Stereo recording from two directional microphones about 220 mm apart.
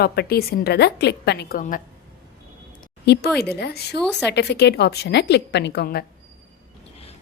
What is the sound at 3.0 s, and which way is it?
Speech, 45° left (ahead or behind).